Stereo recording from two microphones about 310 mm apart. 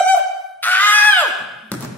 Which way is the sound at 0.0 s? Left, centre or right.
Centre.